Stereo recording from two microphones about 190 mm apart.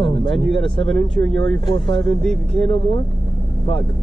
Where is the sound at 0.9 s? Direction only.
85° right.